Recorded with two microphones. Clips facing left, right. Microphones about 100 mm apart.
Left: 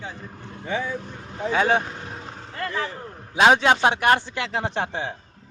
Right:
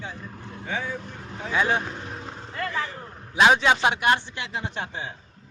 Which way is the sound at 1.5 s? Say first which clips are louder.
Left 3 dB; 55° left (ahead or behind).